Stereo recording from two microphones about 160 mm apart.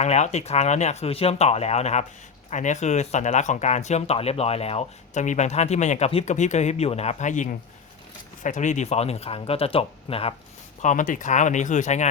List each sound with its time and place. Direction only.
0.0 s speech: 45° left (ahead or behind)
8.4 s speech: 50° left (ahead or behind)
10.8 s speech: 55° left (ahead or behind)